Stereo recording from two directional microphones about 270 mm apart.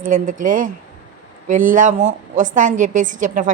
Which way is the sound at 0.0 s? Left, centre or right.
Right.